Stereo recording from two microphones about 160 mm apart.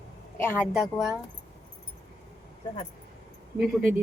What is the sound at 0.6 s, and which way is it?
Speech, 5° right (ahead or behind).